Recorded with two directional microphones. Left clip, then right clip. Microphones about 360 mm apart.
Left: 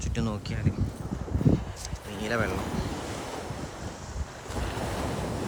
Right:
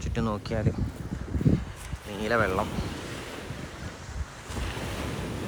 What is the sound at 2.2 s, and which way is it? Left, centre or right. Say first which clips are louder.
Speech: right 4 dB; centre.